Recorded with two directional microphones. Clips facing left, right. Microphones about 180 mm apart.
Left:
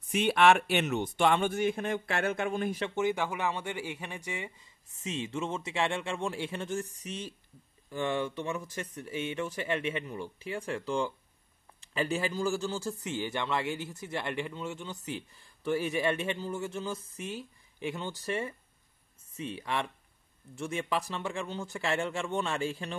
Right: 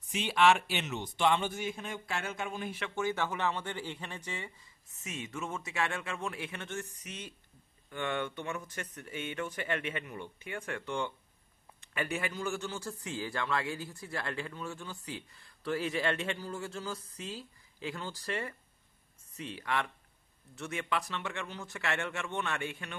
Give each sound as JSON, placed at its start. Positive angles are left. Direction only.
{"t": 0.1, "sound": "speech", "side_deg": 60}
{"t": 2.9, "sound": "speech", "side_deg": 20}
{"t": 4.9, "sound": "a man's voice", "side_deg": 30}
{"t": 9.0, "sound": "a man's voice", "side_deg": 25}